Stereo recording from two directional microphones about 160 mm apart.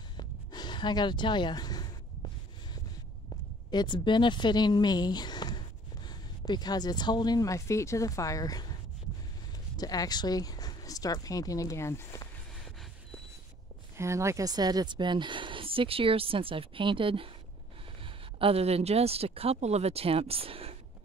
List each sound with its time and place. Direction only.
0.2 s a sound: 25° left (ahead or behind)
3.7 s speech: 30° left (ahead or behind)
9.8 s speech: 25° left (ahead or behind)
13.9 s speech: 15° right (ahead or behind); by 20.7 s 35° right (ahead or behind)